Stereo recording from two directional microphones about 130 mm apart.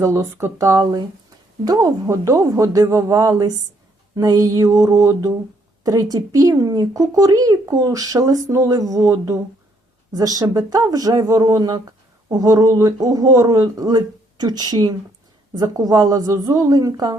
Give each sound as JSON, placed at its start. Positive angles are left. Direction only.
{"t": 0.0, "sound": "speech", "side_deg": -20}